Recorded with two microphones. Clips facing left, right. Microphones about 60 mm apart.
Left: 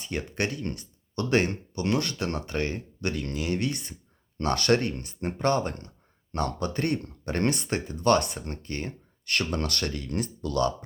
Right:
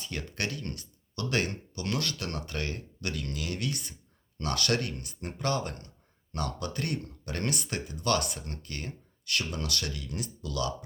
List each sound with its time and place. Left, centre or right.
0.0 s speech: left